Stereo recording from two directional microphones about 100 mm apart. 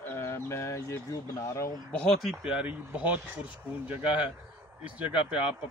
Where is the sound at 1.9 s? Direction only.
10° left (ahead or behind).